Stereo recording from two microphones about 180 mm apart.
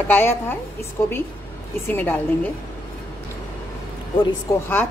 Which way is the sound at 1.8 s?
10° left (ahead or behind).